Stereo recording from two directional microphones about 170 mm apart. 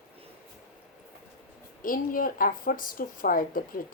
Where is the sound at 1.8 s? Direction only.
55° left (ahead or behind).